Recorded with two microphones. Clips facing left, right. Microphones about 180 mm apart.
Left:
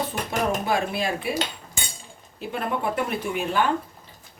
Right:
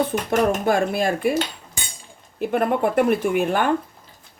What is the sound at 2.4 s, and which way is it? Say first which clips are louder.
Speech: right 7 dB; 55° right (ahead or behind).